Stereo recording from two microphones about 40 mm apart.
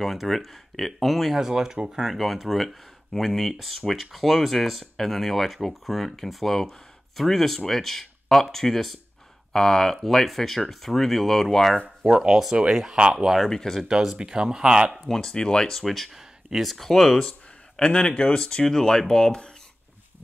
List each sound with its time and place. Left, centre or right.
0.0 s speech: centre
1.4 s speech: centre
2.1 s speech: centre
3.5 s speech: centre
12.1 s speech: centre
12.9 s speech: right
13.5 s speech: centre
13.8 s speech: centre
15.1 s speech: centre
15.8 s speech: centre
17.7 s speech: left